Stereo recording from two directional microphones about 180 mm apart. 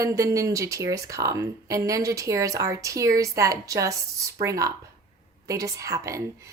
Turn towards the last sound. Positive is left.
turn(degrees=-20)  # may be behind; listen again after turning